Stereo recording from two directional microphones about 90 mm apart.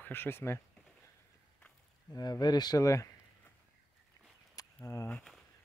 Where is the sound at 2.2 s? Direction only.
50° left (ahead or behind).